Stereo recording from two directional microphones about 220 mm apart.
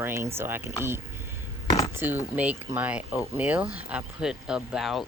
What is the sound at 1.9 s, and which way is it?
Speech, 10° right (ahead or behind).